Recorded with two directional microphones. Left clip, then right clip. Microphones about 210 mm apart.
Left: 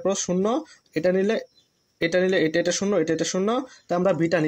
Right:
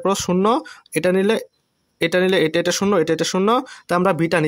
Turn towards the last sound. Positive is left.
turn(degrees=-35)  # may be behind; listen again after turning